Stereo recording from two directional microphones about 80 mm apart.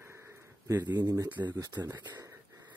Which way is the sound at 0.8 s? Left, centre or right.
Right.